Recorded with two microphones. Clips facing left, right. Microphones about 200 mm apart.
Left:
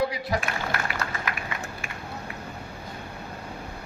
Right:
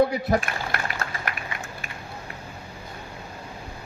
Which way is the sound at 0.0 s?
55° right (ahead or behind).